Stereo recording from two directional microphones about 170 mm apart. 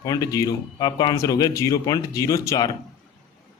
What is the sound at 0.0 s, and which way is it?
Speech, 20° left (ahead or behind).